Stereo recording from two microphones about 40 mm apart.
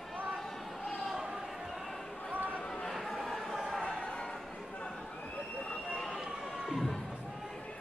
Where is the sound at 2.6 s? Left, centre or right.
Centre.